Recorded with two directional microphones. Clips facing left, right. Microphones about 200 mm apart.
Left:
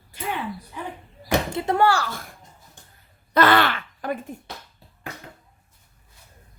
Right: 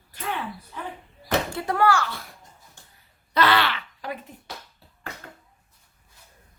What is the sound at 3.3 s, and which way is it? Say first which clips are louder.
Groan: left 4 dB; 50° left (ahead or behind).